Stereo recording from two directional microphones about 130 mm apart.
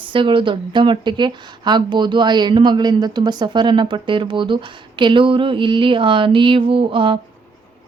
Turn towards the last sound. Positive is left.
turn(degrees=-40)  # may be behind; listen again after turning